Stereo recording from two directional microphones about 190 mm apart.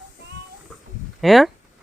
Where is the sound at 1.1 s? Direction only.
Centre (ahead or behind).